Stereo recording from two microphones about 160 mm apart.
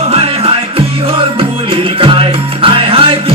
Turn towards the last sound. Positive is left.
turn(degrees=-35)  # may be behind; listen again after turning